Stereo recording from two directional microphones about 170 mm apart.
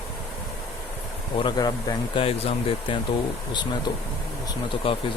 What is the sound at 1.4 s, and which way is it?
Speech, 25° left (ahead or behind).